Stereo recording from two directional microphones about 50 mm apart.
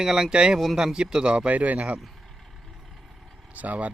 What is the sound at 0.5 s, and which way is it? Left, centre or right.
Speech, centre.